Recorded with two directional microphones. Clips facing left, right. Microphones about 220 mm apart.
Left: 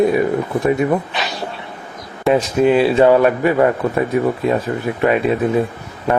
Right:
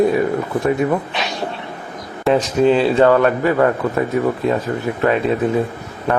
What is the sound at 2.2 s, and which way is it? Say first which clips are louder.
Speech: even; 10° left (ahead or behind).